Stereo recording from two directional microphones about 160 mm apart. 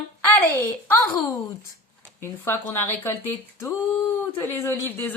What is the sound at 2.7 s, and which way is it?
Speech, 10° left (ahead or behind).